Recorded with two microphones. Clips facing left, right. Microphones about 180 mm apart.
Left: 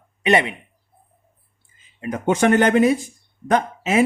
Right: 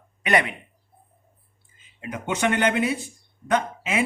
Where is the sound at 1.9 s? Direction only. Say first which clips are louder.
Left 8 dB; 45° left (ahead or behind).